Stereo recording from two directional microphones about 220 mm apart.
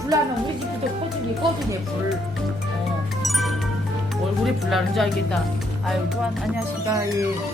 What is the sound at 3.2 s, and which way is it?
Music, centre (ahead or behind).